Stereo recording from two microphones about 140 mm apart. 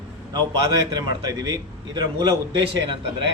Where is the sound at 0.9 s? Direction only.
25° right (ahead or behind).